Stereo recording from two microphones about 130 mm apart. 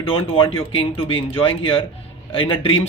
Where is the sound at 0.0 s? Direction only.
45° left (ahead or behind).